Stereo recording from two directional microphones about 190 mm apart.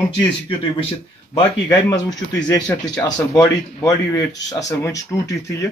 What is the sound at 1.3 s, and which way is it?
Speech, 20° left (ahead or behind).